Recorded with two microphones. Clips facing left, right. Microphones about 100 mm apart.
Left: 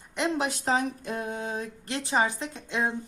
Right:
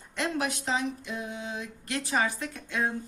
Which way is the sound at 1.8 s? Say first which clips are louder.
Left 2 dB; 30° left (ahead or behind).